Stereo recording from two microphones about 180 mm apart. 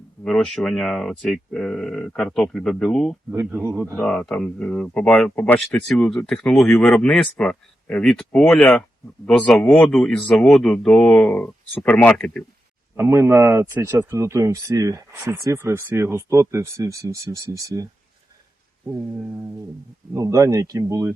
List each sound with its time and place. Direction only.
0.3 s speech: centre (ahead or behind)
3.3 s speech: 10° right (ahead or behind)
3.9 s speech: 5° left (ahead or behind)
13.0 s speech: 15° right (ahead or behind)
18.9 s speech: 5° right (ahead or behind)
20.1 s speech: 15° right (ahead or behind)